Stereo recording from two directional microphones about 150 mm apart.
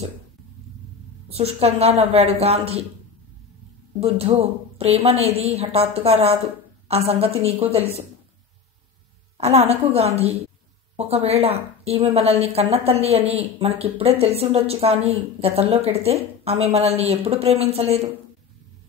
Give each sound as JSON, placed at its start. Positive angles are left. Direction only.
{"t": 1.3, "sound": "speech", "side_deg": -45}
{"t": 4.0, "sound": "a woman's voice", "side_deg": -40}
{"t": 9.4, "sound": "speech", "side_deg": -45}